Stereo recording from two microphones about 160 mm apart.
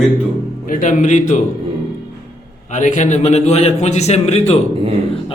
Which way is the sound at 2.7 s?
50° left (ahead or behind).